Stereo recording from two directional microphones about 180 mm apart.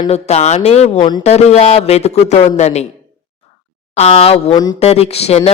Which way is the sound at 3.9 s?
35° left (ahead or behind).